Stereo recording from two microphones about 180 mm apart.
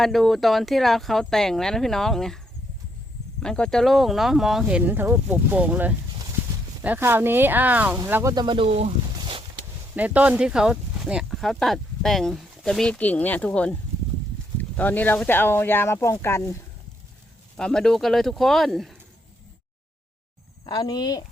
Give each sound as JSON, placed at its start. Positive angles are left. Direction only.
{"t": 0.0, "sound": "speech", "side_deg": 0}
{"t": 3.4, "sound": "speech", "side_deg": 5}
{"t": 9.1, "sound": "a sound", "side_deg": -25}
{"t": 9.9, "sound": "speech", "side_deg": -10}
{"t": 17.6, "sound": "speech", "side_deg": 5}
{"t": 20.7, "sound": "speech", "side_deg": 20}